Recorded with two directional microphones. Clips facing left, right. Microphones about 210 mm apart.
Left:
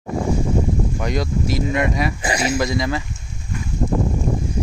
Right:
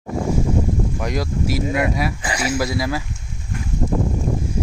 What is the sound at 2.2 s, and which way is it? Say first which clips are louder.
Speech: left 2 dB; 25° left (ahead or behind).